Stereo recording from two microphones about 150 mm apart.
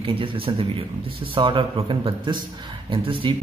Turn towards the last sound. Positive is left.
turn(degrees=-35)  # may be behind; listen again after turning